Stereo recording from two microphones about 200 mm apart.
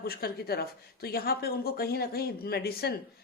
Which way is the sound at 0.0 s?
50° left (ahead or behind).